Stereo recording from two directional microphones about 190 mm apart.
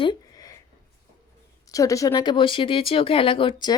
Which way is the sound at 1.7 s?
15° left (ahead or behind).